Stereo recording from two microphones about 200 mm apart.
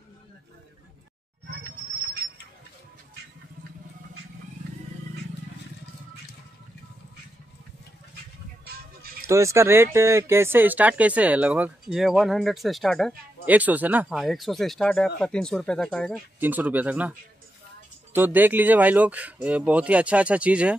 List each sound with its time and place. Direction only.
8.6 s music: 50° right (ahead or behind)
9.3 s speech: 15° right (ahead or behind); by 16.2 s 5° left (ahead or behind)
16.3 s speech: 10° right (ahead or behind)
18.1 s speech: 10° right (ahead or behind)